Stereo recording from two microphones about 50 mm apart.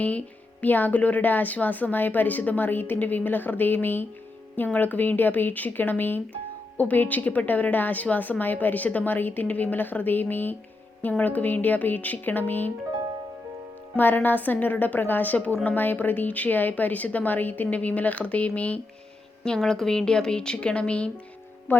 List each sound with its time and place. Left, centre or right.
0.6 s a woman's voice: left
13.9 s a woman's voice: left
19.5 s a woman's voice: centre
21.7 s music: left